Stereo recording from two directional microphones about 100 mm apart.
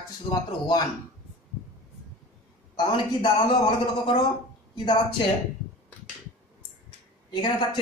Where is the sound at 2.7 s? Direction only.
50° left (ahead or behind).